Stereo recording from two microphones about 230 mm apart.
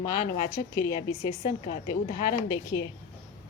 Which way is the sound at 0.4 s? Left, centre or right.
Left.